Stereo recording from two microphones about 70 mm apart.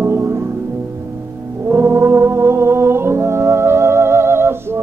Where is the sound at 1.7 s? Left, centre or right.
Right.